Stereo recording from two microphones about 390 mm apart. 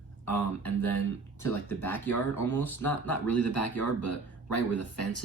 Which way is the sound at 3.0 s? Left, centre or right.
Left.